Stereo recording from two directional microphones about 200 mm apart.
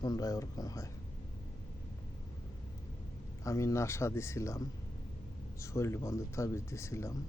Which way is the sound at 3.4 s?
15° left (ahead or behind).